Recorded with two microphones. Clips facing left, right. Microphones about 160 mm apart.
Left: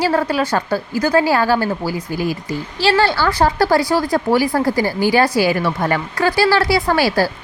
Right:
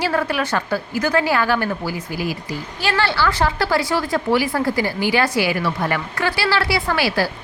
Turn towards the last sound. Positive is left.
turn(degrees=40)  # may be behind; listen again after turning